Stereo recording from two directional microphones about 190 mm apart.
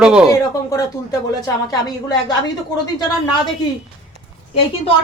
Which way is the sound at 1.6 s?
20° left (ahead or behind).